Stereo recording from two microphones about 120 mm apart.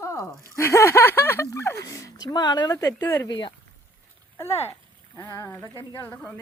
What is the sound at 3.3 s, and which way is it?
Speech, 40° left (ahead or behind).